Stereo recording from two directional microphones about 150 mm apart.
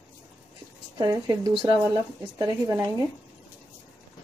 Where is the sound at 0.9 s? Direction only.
25° right (ahead or behind).